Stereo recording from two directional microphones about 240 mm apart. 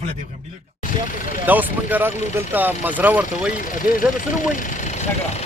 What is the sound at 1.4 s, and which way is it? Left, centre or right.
Speech, centre.